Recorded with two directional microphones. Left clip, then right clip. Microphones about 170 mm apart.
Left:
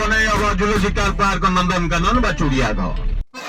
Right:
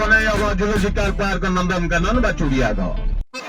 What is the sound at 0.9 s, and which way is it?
Speech, 20° right (ahead or behind).